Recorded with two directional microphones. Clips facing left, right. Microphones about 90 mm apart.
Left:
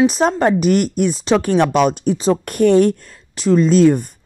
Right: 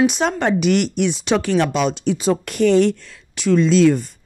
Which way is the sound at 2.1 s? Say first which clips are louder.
Left 2 dB; 35° left (ahead or behind).